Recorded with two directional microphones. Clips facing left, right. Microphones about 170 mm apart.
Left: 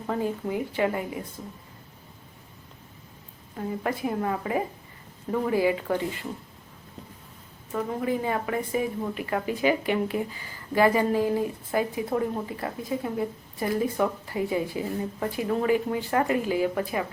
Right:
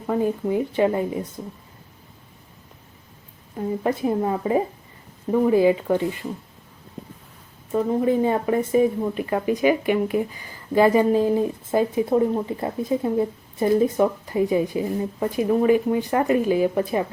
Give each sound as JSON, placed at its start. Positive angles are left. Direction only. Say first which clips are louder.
{"t": 0.1, "sound": "speech", "louder": "right 6 dB", "side_deg": -25}
{"t": 3.8, "sound": "speech", "louder": "right 6 dB", "side_deg": -25}
{"t": 7.7, "sound": "speech", "louder": "right 7 dB", "side_deg": -25}